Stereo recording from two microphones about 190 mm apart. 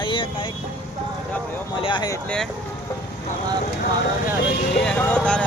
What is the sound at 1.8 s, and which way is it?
Speech, 25° left (ahead or behind).